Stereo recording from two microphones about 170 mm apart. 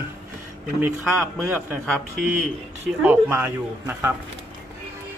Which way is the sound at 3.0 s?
10° right (ahead or behind).